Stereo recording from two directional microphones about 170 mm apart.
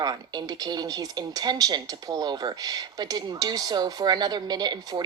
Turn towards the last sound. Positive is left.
turn(degrees=-25)  # may be behind; listen again after turning